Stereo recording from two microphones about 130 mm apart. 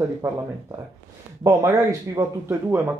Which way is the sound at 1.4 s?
25° right (ahead or behind).